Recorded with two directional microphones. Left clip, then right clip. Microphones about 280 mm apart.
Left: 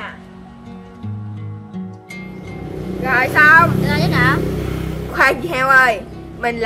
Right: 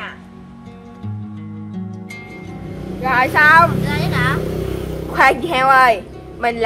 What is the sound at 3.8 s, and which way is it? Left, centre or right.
Vehicle, centre.